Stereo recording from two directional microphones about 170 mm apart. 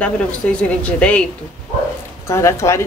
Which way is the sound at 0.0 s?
5° left (ahead or behind).